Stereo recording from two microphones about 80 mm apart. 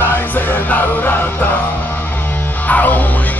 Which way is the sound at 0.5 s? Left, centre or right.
Left.